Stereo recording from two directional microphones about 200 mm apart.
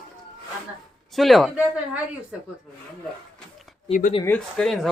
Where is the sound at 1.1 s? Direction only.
Centre (ahead or behind).